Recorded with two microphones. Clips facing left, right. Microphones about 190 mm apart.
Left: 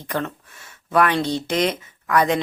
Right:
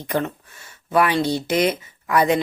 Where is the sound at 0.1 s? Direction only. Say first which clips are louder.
Right 3 dB; 15° right (ahead or behind).